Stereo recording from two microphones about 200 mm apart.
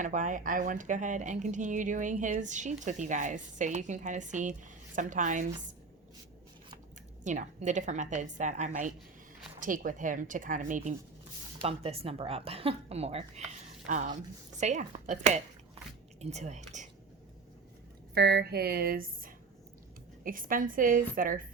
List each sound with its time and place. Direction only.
0.0 s speech: 40° right (ahead or behind)
7.3 s speech: 40° right (ahead or behind)
18.1 s speech: 55° right (ahead or behind)